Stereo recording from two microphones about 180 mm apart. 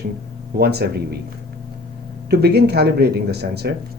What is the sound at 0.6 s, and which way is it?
Speech, 65° right (ahead or behind).